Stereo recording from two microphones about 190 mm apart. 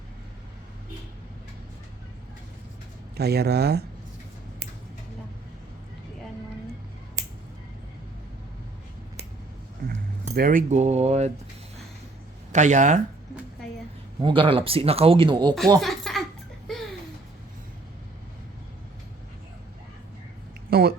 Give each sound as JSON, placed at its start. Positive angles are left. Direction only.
{"t": 3.2, "sound": "speech", "side_deg": -60}
{"t": 9.9, "sound": "speech", "side_deg": -45}
{"t": 12.5, "sound": "speech", "side_deg": -40}
{"t": 14.2, "sound": "speech", "side_deg": -25}
{"t": 15.8, "sound": "a sound", "side_deg": 0}
{"t": 20.7, "sound": "a sound", "side_deg": -55}